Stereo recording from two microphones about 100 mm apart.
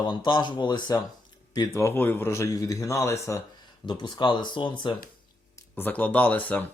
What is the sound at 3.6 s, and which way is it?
Speech, 50° left (ahead or behind).